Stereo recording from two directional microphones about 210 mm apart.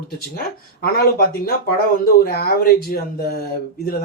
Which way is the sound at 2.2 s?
45° left (ahead or behind).